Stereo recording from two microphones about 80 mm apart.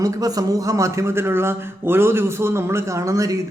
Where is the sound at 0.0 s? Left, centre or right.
Right.